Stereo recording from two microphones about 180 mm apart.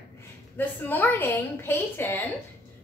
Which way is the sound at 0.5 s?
10° left (ahead or behind).